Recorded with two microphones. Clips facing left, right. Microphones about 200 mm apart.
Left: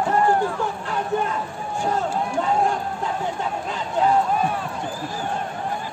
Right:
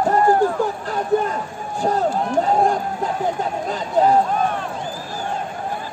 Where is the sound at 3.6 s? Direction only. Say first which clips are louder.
Right 5 dB; 40° right (ahead or behind).